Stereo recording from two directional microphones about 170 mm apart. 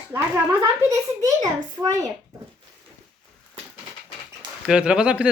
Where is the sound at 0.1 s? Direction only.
20° right (ahead or behind).